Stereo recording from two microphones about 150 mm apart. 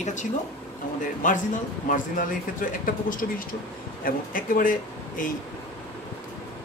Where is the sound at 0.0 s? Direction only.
55° left (ahead or behind).